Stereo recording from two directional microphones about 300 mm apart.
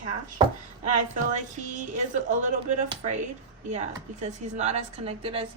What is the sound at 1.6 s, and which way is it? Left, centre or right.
A woman's voice, right.